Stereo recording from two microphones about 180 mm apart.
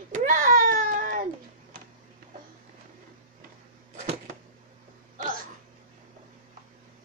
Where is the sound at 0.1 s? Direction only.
45° right (ahead or behind).